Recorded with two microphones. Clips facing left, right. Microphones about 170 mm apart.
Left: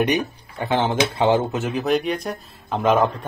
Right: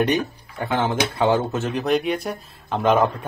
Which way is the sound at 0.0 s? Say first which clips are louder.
Even; 20° left (ahead or behind).